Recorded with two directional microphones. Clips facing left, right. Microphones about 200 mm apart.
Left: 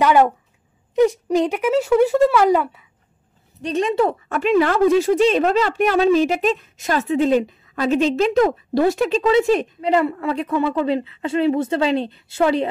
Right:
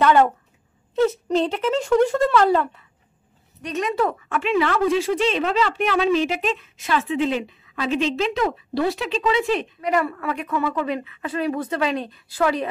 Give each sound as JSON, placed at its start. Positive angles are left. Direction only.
{"t": 0.0, "sound": "speech", "side_deg": 10}
{"t": 3.6, "sound": "speech", "side_deg": 30}
{"t": 9.8, "sound": "a woman's voice", "side_deg": 25}